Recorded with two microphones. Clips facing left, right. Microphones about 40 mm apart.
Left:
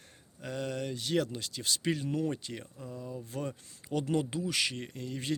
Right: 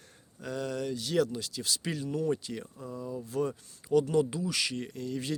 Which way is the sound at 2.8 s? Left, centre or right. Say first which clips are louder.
Right 4 dB; centre.